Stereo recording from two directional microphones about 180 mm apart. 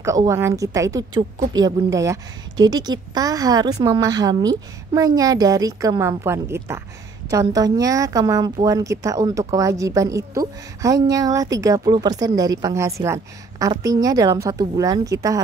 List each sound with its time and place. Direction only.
0.0 s a woman's voice: 15° right (ahead or behind)